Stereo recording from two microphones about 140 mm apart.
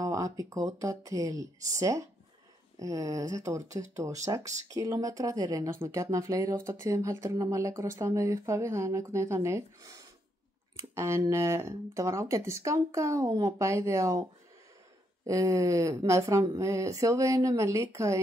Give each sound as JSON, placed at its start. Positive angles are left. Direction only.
{"t": 0.0, "sound": "speech", "side_deg": -25}
{"t": 15.2, "sound": "speech", "side_deg": -25}